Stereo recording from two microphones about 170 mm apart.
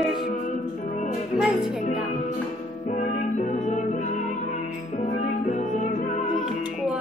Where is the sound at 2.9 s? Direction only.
45° left (ahead or behind).